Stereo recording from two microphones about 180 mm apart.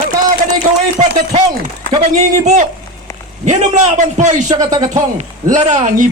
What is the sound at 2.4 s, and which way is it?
Speech, 40° right (ahead or behind).